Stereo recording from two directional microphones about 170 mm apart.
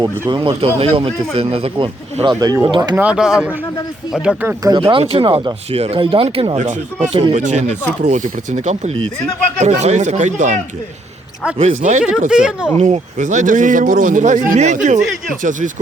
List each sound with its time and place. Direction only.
0.0 s speech: 25° right (ahead or behind)
2.9 s speech: 5° right (ahead or behind)
4.6 s speech: 30° right (ahead or behind)
6.6 s speech: 45° right (ahead or behind)
7.1 s speech: 30° right (ahead or behind)
7.3 s speech: 45° right (ahead or behind)
12.3 s speech: 5° right (ahead or behind)
12.7 s speech: 40° right (ahead or behind)